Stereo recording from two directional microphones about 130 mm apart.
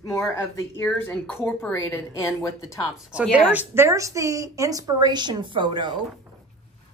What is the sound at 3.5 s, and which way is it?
A woman's voice, 15° right (ahead or behind).